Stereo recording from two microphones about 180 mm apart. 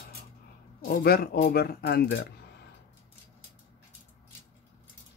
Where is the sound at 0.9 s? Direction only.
55° left (ahead or behind).